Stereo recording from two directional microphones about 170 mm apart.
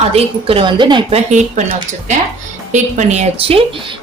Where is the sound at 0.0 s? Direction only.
35° right (ahead or behind).